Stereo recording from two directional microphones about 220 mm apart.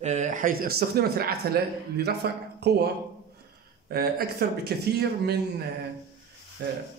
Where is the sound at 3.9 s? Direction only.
45° right (ahead or behind).